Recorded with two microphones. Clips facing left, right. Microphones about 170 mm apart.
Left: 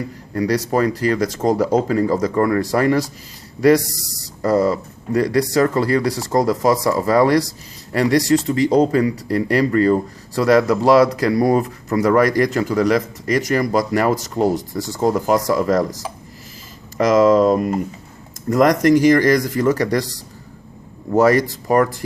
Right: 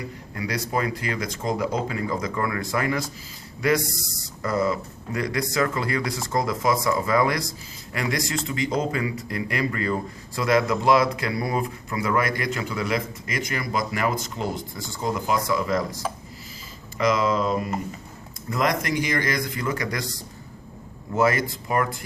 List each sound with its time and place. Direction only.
0.3 s speech: 40° left (ahead or behind)
17.0 s speech: 40° left (ahead or behind)